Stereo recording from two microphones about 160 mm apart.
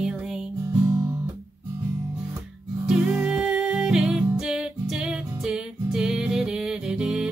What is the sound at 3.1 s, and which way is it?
Music, 5° right (ahead or behind).